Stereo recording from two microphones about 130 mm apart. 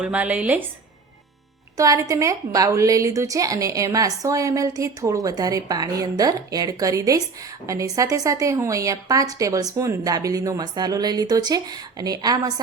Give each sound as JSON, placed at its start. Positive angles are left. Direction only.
{"t": 0.0, "sound": "speech", "side_deg": -10}
{"t": 1.7, "sound": "a woman's voice", "side_deg": -25}